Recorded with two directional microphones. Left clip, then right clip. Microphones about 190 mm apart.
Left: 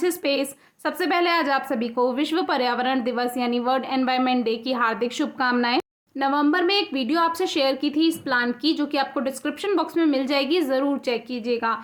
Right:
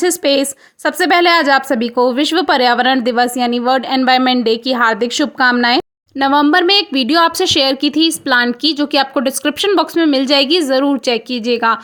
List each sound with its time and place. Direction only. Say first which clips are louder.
0.0 s a woman's voice: right 9 dB; 40° right (ahead or behind)